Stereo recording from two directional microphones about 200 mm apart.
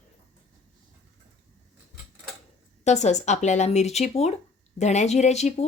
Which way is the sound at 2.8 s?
35° left (ahead or behind).